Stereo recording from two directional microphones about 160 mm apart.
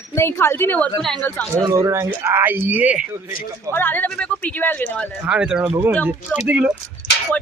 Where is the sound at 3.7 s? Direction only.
10° left (ahead or behind).